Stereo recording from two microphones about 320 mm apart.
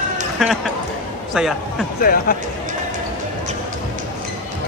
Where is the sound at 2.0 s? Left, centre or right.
Left.